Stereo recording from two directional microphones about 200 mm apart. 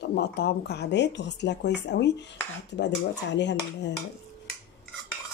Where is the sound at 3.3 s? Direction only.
60° left (ahead or behind).